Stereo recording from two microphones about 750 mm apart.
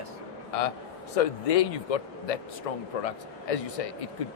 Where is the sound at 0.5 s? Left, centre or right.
Left.